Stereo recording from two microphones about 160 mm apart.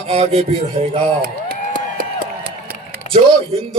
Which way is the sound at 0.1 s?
40° right (ahead or behind).